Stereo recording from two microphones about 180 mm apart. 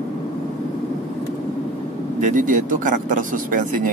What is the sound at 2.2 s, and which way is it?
Speech, 45° right (ahead or behind).